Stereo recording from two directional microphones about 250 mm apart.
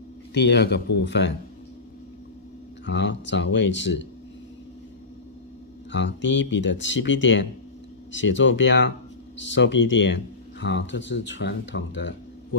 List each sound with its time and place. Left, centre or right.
0.3 s speech: left
2.8 s speech: left
5.9 s speech: left